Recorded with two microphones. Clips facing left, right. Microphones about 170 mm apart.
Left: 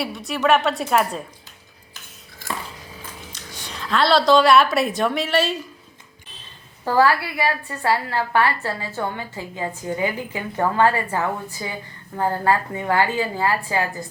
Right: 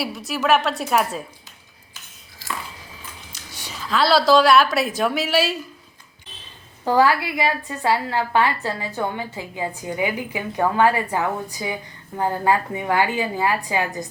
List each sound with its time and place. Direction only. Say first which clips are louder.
0.0 s a woman's voice: left 2 dB; centre (ahead or behind)
3.3 s a sound: left 3 dB; 5° right (ahead or behind)
3.7 s a woman's voice: even; centre (ahead or behind)
6.8 s a woman's voice: even; 15° right (ahead or behind)